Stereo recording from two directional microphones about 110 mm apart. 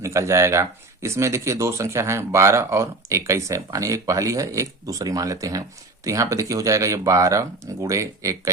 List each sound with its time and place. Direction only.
0.0 s speech: 30° right (ahead or behind)